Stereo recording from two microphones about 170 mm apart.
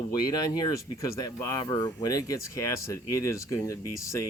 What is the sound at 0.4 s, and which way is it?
Speech, 20° left (ahead or behind).